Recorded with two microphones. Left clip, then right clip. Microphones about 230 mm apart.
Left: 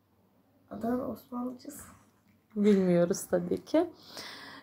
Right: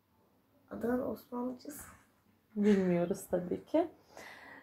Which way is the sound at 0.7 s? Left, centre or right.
Centre.